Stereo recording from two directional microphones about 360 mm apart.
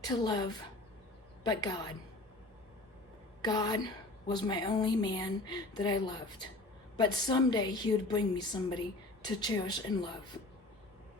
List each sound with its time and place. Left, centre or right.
0.1 s speech: centre
3.4 s speech: centre